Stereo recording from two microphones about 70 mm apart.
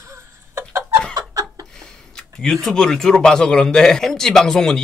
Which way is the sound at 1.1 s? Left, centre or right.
Right.